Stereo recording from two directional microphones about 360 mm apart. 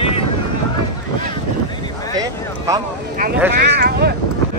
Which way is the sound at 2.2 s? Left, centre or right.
Centre.